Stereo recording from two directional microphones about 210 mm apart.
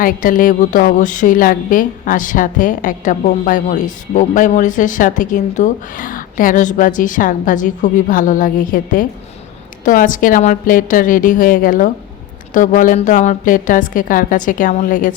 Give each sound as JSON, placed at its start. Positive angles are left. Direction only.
{"t": 0.0, "sound": "a woman's voice", "side_deg": 40}